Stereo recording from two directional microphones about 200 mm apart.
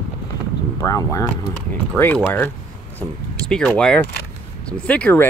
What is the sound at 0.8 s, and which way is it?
Speech, 15° left (ahead or behind).